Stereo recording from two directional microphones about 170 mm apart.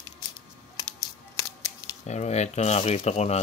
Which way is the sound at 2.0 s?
40° left (ahead or behind).